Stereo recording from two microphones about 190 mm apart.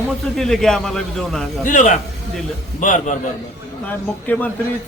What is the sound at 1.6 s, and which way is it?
A man's voice, 40° left (ahead or behind).